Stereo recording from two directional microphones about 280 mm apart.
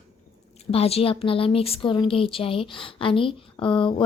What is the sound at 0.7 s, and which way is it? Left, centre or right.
A woman's voice, left.